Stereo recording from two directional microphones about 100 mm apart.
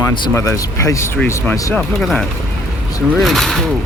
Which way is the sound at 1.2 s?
20° left (ahead or behind).